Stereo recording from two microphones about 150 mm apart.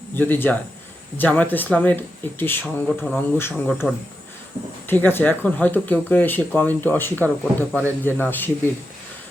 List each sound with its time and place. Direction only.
0.2 s speech: 10° left (ahead or behind)